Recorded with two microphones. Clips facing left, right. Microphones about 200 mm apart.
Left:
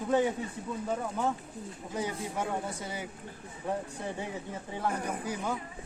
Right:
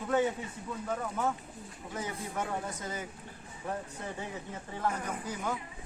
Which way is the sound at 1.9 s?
10° left (ahead or behind).